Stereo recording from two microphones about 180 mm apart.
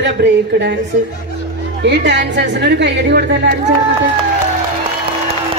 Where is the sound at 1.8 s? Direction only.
75° right (ahead or behind).